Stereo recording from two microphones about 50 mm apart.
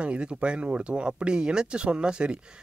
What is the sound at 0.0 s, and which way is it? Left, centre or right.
Speech, right.